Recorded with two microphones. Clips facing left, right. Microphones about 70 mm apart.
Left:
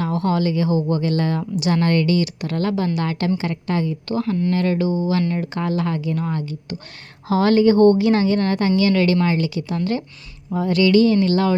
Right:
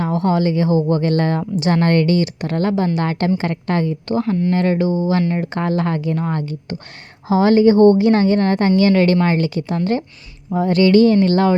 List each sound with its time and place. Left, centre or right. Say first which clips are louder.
0.0 s speech: right 3 dB; right
4.1 s speech: right 3 dB; right
7.3 s speech: right 3 dB; right